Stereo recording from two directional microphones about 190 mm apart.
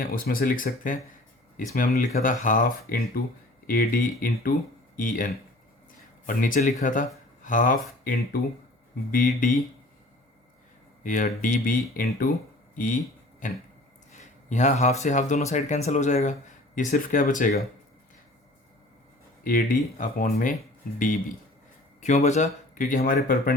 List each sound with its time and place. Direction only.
0.0 s speech: 50° left (ahead or behind)
11.0 s speech: 45° left (ahead or behind)
19.5 s speech: 45° left (ahead or behind)
22.0 s speech: 40° left (ahead or behind)